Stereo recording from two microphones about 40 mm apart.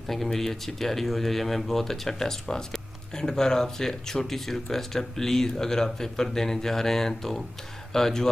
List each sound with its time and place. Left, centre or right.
0.1 s speech: centre